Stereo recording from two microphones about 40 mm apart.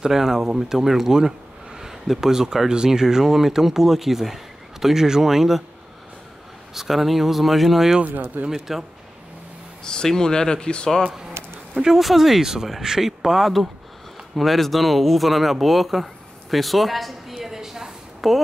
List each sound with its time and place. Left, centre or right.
0.0 s speech: centre
6.7 s speech: centre
10.0 s speech: centre
11.7 s speech: centre